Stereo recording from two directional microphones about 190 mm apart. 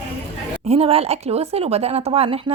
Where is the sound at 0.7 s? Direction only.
30° right (ahead or behind).